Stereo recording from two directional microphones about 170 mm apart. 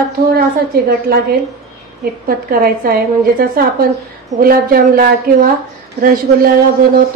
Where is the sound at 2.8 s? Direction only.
55° right (ahead or behind).